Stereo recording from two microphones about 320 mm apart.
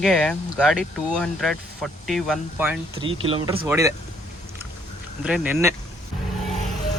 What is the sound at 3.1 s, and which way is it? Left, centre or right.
Speech, centre.